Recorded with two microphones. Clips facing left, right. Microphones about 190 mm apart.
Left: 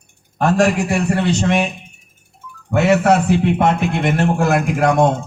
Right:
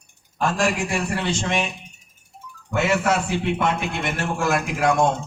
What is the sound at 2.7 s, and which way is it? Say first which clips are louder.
A man's voice: left 7 dB; 60° left (ahead or behind).